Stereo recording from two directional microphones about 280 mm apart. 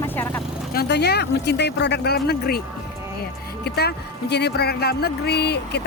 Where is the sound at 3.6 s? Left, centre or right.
Left.